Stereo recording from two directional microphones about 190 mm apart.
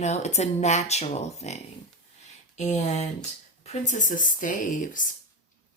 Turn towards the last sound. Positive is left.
turn(degrees=45)  # may be behind; listen again after turning